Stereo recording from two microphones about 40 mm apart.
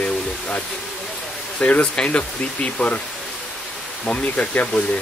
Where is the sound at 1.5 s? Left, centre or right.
Left.